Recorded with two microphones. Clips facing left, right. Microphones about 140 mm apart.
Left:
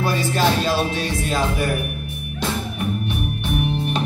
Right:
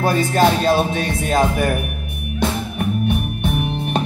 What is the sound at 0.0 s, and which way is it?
Music, 50° right (ahead or behind).